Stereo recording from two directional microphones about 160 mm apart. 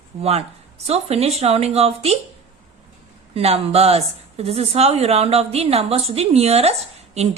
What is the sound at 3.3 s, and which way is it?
Speech, 40° right (ahead or behind).